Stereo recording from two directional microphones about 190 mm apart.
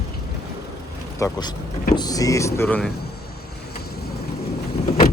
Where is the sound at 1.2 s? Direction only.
15° left (ahead or behind).